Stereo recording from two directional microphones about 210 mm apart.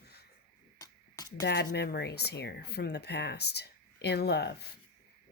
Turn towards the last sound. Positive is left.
turn(degrees=50)  # may be behind; listen again after turning